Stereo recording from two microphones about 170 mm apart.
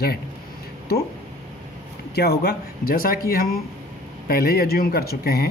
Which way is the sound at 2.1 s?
70° left (ahead or behind).